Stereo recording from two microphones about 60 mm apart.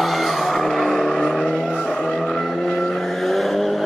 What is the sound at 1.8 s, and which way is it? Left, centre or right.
Vehicle, centre.